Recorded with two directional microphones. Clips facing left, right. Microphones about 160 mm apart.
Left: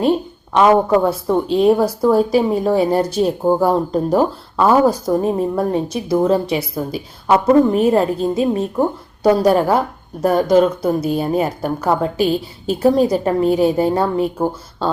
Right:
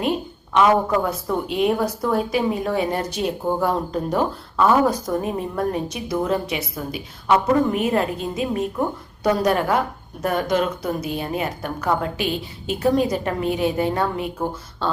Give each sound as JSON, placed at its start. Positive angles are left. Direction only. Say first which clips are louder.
{"t": 0.0, "sound": "a woman's voice", "louder": "left 7 dB", "side_deg": 35}